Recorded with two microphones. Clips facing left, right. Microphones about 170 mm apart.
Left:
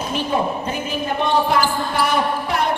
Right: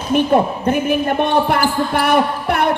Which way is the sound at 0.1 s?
60° right (ahead or behind).